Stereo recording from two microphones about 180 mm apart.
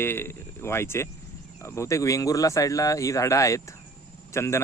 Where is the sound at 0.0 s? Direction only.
15° left (ahead or behind).